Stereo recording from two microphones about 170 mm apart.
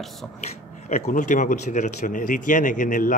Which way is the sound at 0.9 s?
45° left (ahead or behind).